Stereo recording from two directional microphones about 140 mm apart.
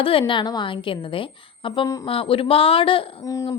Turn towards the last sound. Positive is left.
turn(degrees=25)  # may be behind; listen again after turning